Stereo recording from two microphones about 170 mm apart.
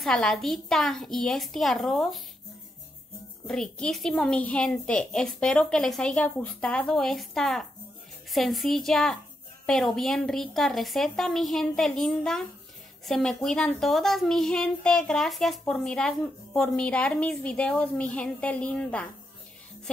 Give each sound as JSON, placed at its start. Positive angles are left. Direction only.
{"t": 0.0, "sound": "speech", "side_deg": 5}
{"t": 3.4, "sound": "speech", "side_deg": 5}